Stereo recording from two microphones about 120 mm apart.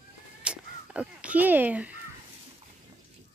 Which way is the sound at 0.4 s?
10° right (ahead or behind).